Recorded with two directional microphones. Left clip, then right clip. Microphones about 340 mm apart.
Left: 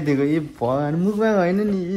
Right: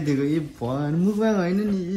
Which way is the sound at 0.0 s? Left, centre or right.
Centre.